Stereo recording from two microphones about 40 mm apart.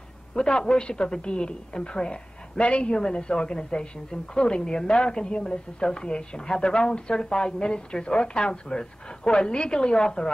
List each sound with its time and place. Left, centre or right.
0.3 s a woman's voice: centre
2.6 s a woman's voice: left
2.9 s a woman's voice: left